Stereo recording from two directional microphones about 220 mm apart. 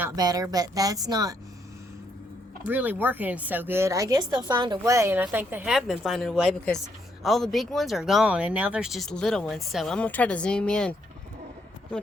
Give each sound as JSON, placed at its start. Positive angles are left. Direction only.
{"t": 0.0, "sound": "speech", "side_deg": -15}
{"t": 2.6, "sound": "speech", "side_deg": -10}